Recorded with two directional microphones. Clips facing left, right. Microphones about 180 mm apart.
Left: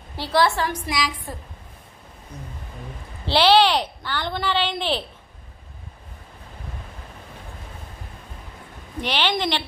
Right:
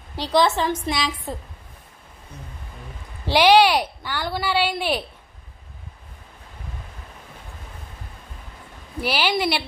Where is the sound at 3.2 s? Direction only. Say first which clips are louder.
Right 2 dB; 10° right (ahead or behind).